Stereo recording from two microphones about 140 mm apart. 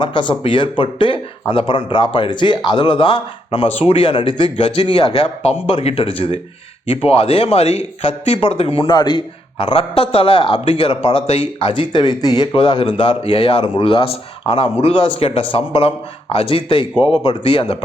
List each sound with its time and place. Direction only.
0.0 s speech: 35° left (ahead or behind)